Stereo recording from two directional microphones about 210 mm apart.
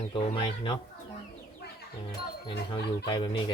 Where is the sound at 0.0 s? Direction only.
30° left (ahead or behind).